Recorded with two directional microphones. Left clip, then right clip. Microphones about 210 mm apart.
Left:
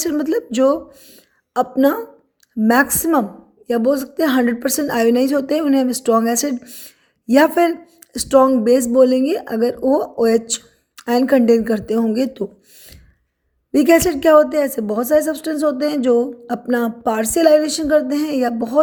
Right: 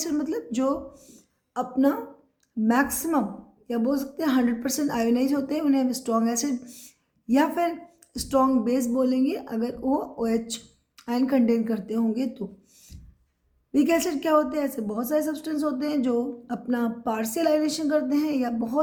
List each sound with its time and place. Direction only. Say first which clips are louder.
0.0 s a woman's voice: left 9 dB; 35° left (ahead or behind)